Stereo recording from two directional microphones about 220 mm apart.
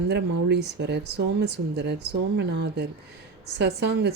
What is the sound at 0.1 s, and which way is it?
Speech, 50° right (ahead or behind).